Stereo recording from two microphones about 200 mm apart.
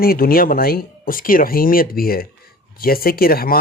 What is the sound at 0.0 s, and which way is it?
Speech, 50° left (ahead or behind).